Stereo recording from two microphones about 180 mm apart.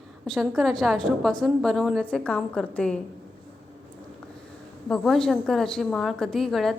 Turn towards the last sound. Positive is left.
turn(degrees=0)  # may be behind; listen again after turning